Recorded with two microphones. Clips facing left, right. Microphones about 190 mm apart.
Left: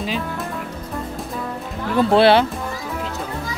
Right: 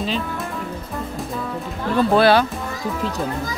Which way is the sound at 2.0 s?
25° left (ahead or behind).